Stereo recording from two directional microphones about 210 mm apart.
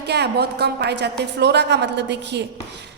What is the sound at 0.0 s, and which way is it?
A woman's voice, 50° right (ahead or behind).